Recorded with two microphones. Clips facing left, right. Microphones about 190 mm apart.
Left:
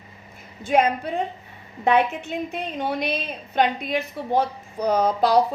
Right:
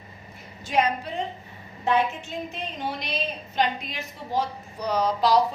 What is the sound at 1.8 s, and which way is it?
A woman's voice, 65° left (ahead or behind).